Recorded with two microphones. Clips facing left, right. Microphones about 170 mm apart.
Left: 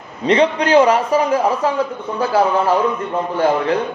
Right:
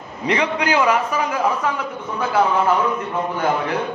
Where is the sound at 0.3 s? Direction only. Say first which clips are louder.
Left 6 dB; 30° left (ahead or behind).